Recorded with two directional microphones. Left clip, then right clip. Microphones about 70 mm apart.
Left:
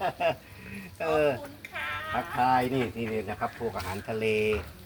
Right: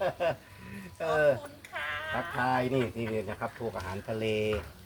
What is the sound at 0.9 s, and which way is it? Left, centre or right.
Speech, right.